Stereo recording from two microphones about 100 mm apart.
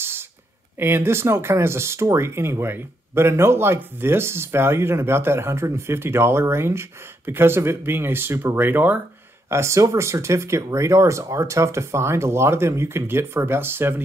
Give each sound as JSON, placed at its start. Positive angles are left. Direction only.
{"t": 0.7, "sound": "speech", "side_deg": -20}
{"t": 9.5, "sound": "speech", "side_deg": -30}